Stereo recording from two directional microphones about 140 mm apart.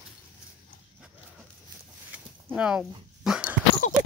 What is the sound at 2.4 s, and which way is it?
Speech, 5° right (ahead or behind).